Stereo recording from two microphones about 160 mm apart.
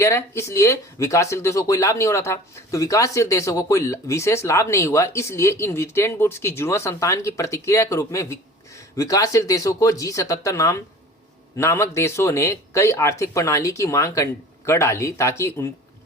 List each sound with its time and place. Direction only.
0.0 s speech: 15° left (ahead or behind)